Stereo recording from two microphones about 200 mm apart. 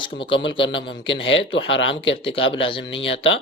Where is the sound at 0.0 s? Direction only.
25° left (ahead or behind).